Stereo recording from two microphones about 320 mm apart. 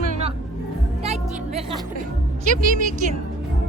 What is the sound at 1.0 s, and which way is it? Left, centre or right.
Music, centre.